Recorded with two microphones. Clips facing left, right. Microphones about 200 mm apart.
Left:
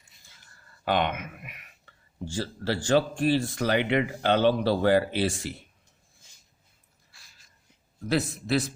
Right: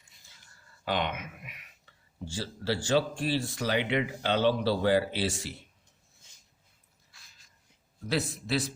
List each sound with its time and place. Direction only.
0.9 s speech: 55° left (ahead or behind)
8.0 s a man's voice: 55° left (ahead or behind)